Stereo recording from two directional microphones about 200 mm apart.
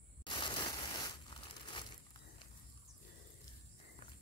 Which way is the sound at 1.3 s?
25° left (ahead or behind).